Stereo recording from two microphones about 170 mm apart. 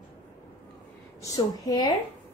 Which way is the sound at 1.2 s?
20° left (ahead or behind).